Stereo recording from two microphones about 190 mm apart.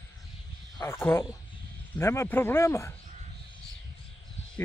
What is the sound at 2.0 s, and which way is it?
Speech, 15° left (ahead or behind).